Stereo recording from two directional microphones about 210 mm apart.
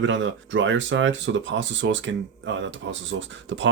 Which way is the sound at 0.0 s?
60° right (ahead or behind).